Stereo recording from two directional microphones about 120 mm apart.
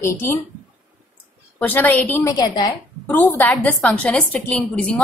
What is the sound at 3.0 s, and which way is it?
A woman's voice, 15° left (ahead or behind).